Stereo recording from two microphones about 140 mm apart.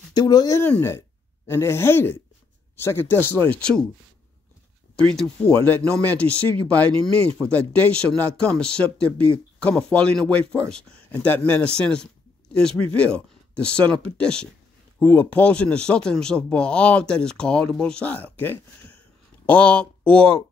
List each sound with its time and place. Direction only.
0.1 s speech: 30° left (ahead or behind)
0.6 s speech: 15° left (ahead or behind)
5.1 s speech: 5° left (ahead or behind)